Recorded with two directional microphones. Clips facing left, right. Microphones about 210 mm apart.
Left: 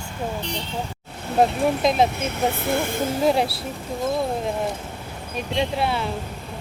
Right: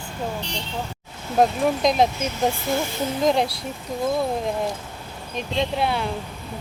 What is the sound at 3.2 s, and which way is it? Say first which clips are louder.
Speech: even; 5° left (ahead or behind).